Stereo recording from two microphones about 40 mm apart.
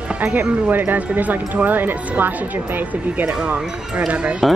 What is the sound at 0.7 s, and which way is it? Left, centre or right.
Speech, right.